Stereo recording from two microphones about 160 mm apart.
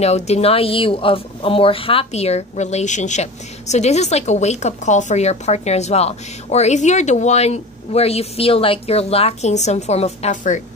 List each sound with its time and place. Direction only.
0.0 s speech: 40° left (ahead or behind)